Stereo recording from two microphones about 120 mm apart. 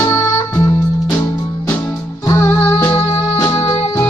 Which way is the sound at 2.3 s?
20° left (ahead or behind).